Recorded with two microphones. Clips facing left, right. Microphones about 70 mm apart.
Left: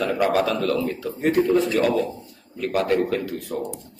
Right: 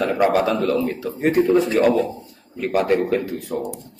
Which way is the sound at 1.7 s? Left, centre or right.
Right.